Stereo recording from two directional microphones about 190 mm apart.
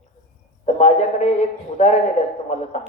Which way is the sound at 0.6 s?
35° left (ahead or behind).